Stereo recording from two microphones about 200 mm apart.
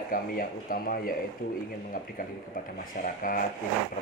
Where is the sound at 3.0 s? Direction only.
45° left (ahead or behind).